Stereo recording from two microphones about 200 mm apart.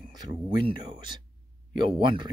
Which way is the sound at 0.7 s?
20° right (ahead or behind).